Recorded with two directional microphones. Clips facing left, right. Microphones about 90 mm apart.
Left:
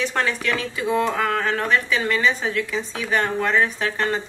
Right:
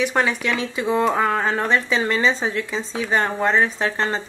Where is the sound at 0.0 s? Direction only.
15° right (ahead or behind).